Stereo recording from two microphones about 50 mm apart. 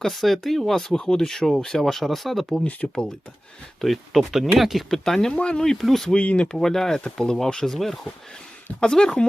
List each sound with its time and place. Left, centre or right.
0.0 s speech: centre
0.9 s speech: centre
2.8 s speech: centre
3.8 s speech: centre
5.4 s speech: left
5.7 s speech: centre
6.1 s speech: left
6.6 s speech: centre
8.8 s speech: centre